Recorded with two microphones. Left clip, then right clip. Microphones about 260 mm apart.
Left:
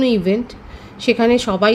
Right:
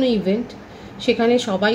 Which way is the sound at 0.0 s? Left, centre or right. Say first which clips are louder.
Left 3 dB; left.